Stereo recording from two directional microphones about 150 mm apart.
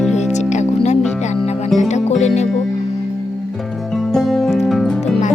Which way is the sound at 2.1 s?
50° left (ahead or behind).